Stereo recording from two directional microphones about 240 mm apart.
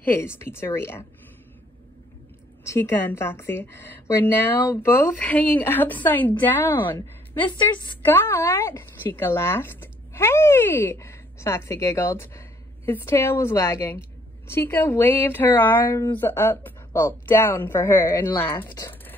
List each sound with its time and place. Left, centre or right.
0.0 s speech: centre
2.6 s speech: centre
7.7 s a woman's voice: centre